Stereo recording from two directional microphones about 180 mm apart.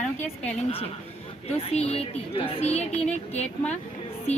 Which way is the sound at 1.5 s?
35° left (ahead or behind).